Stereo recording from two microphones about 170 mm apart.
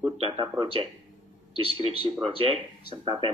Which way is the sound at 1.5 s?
35° right (ahead or behind).